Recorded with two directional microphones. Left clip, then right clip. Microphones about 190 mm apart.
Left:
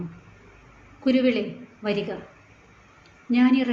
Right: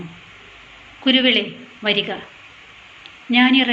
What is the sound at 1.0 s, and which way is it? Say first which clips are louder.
Speech: right 6 dB; 10° left (ahead or behind).